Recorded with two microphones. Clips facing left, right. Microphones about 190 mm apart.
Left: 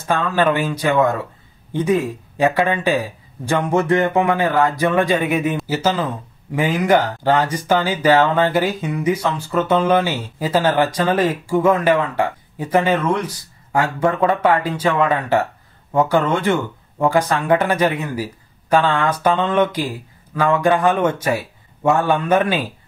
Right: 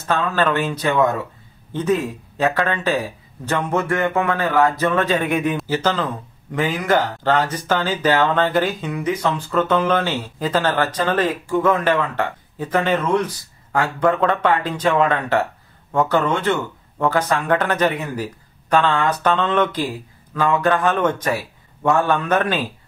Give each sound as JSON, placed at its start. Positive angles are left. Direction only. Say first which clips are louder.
{"t": 0.0, "sound": "speech", "louder": "left 2 dB", "side_deg": 10}
{"t": 1.7, "sound": "speech", "louder": "left 2 dB", "side_deg": 10}
{"t": 13.9, "sound": "speech", "louder": "right 1 dB", "side_deg": 10}